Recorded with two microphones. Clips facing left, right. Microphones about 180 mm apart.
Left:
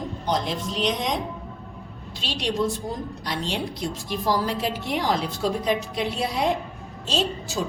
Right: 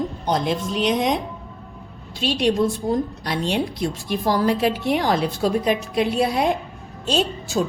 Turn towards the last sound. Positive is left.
turn(degrees=-55)  # may be behind; listen again after turning